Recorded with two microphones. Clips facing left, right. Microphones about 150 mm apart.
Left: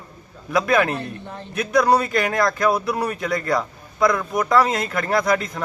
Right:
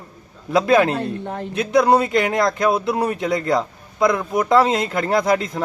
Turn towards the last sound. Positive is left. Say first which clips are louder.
# right 2 dB
turn(degrees=-25)  # may be behind; listen again after turning